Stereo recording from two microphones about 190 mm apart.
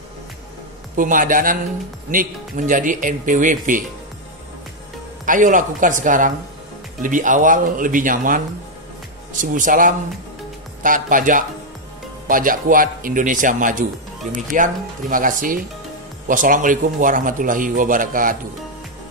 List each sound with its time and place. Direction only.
0.9 s a man's voice: 45° right (ahead or behind)
5.2 s a man's voice: 45° right (ahead or behind)